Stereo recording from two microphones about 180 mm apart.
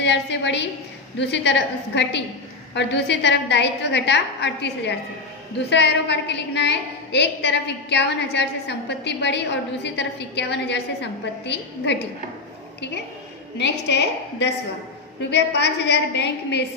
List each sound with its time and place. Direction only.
0.0 s a woman's voice: 75° left (ahead or behind)
13.6 s a woman's voice: 70° left (ahead or behind)